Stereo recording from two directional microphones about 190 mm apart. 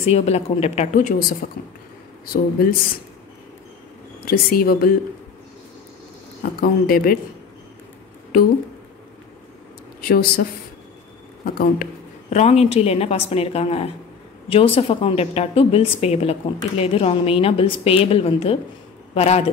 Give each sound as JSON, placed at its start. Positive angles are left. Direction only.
{"t": 0.0, "sound": "a woman's voice", "side_deg": 35}
{"t": 2.2, "sound": "speech", "side_deg": 50}
{"t": 4.3, "sound": "speech", "side_deg": 50}
{"t": 6.6, "sound": "speech", "side_deg": 50}
{"t": 10.0, "sound": "speech", "side_deg": 50}
{"t": 11.4, "sound": "a woman's voice", "side_deg": 50}